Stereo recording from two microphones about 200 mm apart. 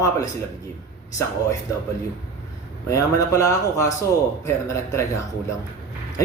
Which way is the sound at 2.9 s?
15° left (ahead or behind).